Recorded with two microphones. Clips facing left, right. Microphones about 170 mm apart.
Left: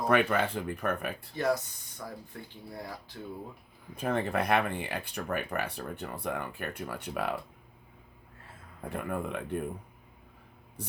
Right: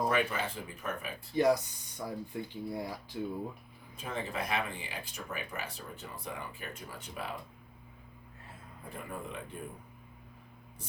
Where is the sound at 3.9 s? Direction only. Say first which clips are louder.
Left 8 dB; 60° left (ahead or behind).